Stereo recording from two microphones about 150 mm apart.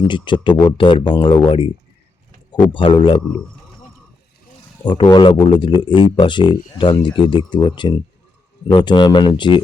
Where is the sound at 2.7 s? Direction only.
35° left (ahead or behind).